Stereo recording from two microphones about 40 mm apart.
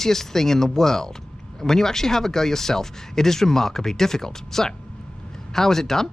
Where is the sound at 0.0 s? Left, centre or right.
Centre.